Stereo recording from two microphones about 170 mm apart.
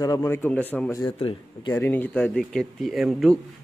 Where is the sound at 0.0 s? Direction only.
20° left (ahead or behind).